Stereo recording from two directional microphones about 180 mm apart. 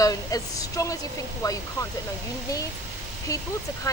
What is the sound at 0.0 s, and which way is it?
A woman's voice, 20° left (ahead or behind).